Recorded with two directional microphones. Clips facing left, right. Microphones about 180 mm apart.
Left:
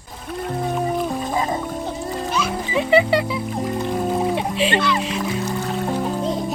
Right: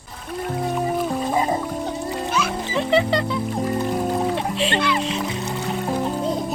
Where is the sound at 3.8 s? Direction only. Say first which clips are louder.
Left 3 dB; 5° right (ahead or behind).